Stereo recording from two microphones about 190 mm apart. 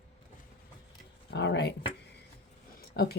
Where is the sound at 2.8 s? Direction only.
55° left (ahead or behind).